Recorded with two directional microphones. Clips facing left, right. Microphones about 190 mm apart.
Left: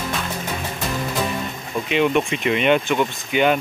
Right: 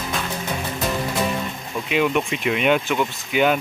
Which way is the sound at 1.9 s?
Centre (ahead or behind).